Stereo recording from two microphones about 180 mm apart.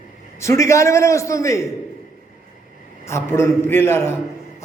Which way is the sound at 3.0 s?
15° left (ahead or behind).